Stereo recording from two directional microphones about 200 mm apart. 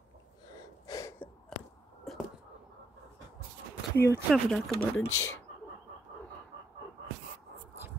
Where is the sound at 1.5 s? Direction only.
Centre (ahead or behind).